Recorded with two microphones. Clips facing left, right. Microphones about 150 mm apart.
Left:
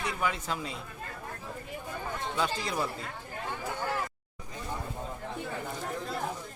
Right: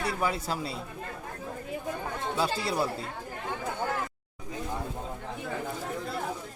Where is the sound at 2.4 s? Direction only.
35° right (ahead or behind).